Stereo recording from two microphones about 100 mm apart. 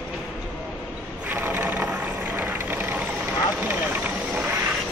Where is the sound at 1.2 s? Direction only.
20° right (ahead or behind).